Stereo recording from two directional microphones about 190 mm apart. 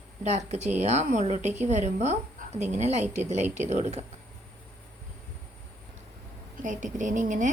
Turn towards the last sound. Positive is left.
turn(degrees=-40)  # may be behind; listen again after turning